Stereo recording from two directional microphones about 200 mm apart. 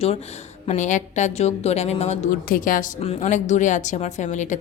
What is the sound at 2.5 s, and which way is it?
Speech, 45° left (ahead or behind).